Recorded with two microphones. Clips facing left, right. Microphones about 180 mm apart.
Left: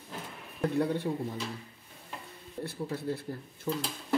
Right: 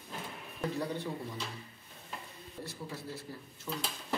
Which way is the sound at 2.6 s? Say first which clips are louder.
Left 8 dB; 60° left (ahead or behind).